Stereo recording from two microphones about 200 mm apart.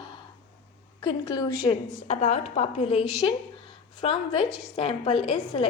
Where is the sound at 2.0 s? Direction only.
40° left (ahead or behind).